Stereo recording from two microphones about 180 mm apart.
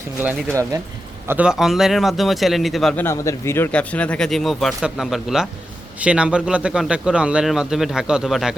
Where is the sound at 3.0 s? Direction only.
15° left (ahead or behind).